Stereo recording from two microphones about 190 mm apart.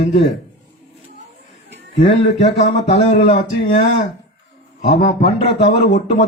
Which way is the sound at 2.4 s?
35° left (ahead or behind).